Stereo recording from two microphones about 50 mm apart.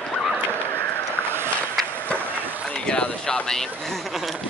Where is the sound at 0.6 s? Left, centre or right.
Left.